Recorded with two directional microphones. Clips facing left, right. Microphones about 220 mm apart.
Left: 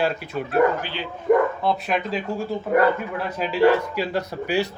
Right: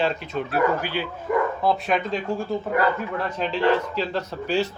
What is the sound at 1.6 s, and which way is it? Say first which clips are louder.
Speech: right 1 dB; centre (ahead or behind).